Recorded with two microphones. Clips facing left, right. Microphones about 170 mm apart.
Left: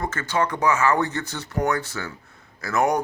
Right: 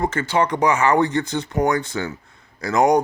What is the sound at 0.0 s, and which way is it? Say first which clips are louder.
Speech: right 4 dB; 10° right (ahead or behind).